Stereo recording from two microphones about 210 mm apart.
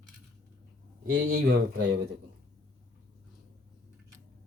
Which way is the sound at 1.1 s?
45° right (ahead or behind).